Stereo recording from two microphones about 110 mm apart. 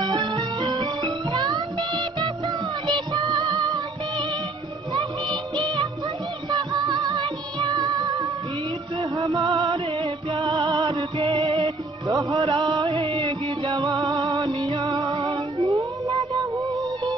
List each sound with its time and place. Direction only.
0.4 s music: 45° right (ahead or behind)
4.9 s music: 40° right (ahead or behind)
9.1 s music: 40° right (ahead or behind)
12.1 s music: 30° right (ahead or behind)
12.5 s music: 45° right (ahead or behind)
13.8 s music: 30° right (ahead or behind)
14.8 s music: 40° right (ahead or behind)
15.6 s a sound: 30° right (ahead or behind)